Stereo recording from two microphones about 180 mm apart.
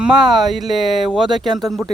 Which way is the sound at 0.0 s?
Centre (ahead or behind).